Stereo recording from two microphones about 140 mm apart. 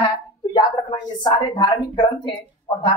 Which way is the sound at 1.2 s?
35° left (ahead or behind).